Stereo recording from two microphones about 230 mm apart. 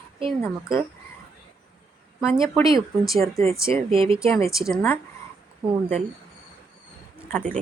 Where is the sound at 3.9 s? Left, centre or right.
Right.